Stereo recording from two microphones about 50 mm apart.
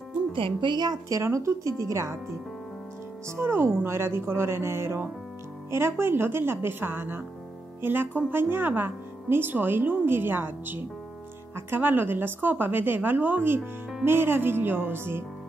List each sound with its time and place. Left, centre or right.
1.0 s speech: right
3.3 s speech: right